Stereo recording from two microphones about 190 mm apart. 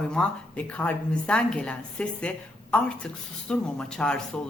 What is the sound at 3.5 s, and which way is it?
Speech, 5° left (ahead or behind).